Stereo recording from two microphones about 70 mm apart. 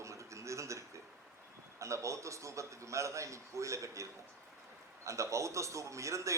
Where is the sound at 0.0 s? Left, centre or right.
Right.